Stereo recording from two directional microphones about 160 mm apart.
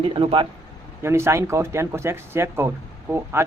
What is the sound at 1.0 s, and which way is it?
Speech, 15° right (ahead or behind).